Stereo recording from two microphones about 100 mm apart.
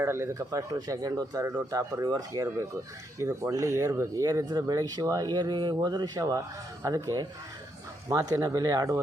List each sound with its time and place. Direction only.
0.0 s speech: 25° right (ahead or behind)